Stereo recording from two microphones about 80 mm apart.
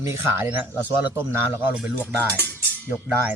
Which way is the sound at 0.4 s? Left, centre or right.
Centre.